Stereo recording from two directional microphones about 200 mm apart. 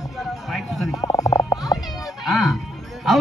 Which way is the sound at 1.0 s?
15° left (ahead or behind).